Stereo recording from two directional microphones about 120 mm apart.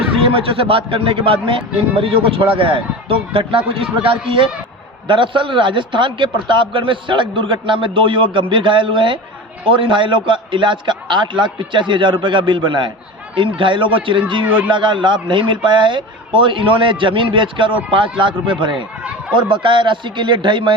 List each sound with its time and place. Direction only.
0.3 s a man's voice: 50° right (ahead or behind)
14.4 s speech: 15° right (ahead or behind)
14.7 s a man's voice: 40° right (ahead or behind)